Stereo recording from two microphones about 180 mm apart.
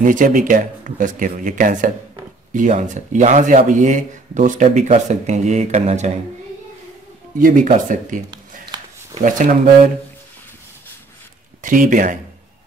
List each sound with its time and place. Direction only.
0.0 s speech: 45° right (ahead or behind)
7.3 s speech: 50° right (ahead or behind)
9.2 s speech: 45° right (ahead or behind)
11.6 s speech: 50° right (ahead or behind)